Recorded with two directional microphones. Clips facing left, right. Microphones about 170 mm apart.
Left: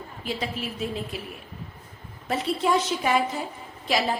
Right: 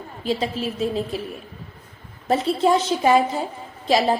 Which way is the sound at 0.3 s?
30° right (ahead or behind).